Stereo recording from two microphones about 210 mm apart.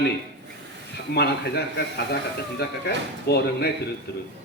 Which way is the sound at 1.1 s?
50° left (ahead or behind).